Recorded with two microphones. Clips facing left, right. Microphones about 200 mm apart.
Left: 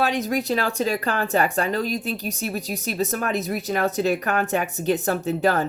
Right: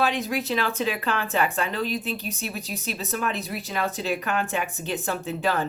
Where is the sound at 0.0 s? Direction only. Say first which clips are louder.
Left 2 dB; 40° left (ahead or behind).